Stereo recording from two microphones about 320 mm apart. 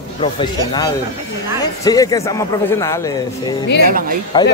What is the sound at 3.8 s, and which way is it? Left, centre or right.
Speech, right.